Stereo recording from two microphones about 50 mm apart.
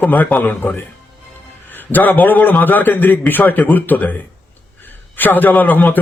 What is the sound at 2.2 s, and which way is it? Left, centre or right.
Speech, left.